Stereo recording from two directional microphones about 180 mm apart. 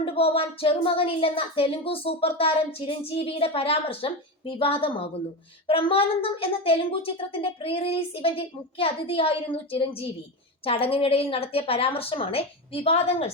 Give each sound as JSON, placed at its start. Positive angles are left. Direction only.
{"t": 0.0, "sound": "speech", "side_deg": 30}